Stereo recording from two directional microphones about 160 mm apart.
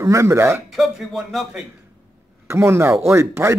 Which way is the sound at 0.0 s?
20° right (ahead or behind).